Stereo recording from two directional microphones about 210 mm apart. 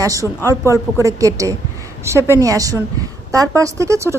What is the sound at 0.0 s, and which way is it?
A woman's voice, 15° right (ahead or behind).